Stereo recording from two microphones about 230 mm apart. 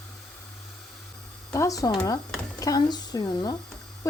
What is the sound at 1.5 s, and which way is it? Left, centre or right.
Speech, centre.